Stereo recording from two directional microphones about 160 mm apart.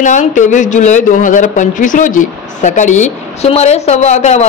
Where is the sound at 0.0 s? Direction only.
50° left (ahead or behind).